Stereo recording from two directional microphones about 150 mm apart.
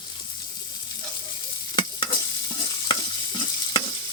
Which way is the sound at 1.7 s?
35° left (ahead or behind).